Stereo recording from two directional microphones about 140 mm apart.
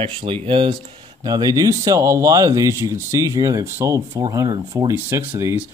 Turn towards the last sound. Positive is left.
turn(degrees=-20)  # may be behind; listen again after turning